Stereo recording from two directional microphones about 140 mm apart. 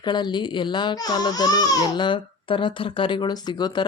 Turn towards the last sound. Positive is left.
turn(degrees=30)  # may be behind; listen again after turning